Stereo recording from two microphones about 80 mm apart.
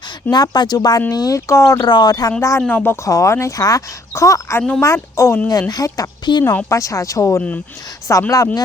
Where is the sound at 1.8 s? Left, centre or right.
Left.